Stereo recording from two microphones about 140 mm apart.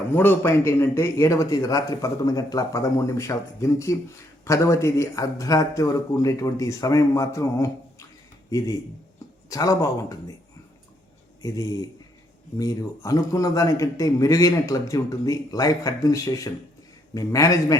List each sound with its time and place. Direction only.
0.1 s a man's voice: 15° left (ahead or behind)
11.4 s a man's voice: 25° left (ahead or behind)